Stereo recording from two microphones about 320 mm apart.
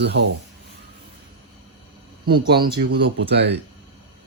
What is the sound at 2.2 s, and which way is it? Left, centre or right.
Speech, right.